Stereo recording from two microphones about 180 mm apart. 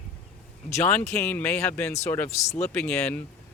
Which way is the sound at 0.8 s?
10° left (ahead or behind).